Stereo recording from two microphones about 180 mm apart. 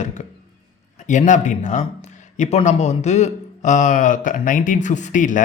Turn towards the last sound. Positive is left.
turn(degrees=45)  # may be behind; listen again after turning